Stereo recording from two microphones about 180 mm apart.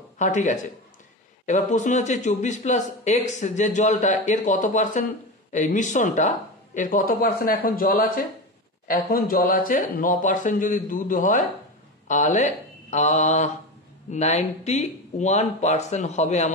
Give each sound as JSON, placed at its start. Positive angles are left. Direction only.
{"t": 0.2, "sound": "a man's voice", "side_deg": 40}